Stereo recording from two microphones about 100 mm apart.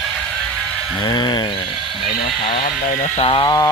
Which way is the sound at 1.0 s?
45° left (ahead or behind).